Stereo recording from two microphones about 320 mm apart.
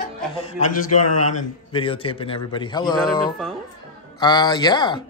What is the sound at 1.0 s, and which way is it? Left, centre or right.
Speech, left.